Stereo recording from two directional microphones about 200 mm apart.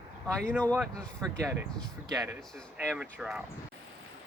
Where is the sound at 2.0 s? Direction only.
20° right (ahead or behind).